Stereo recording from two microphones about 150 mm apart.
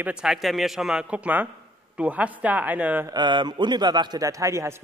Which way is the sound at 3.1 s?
30° right (ahead or behind).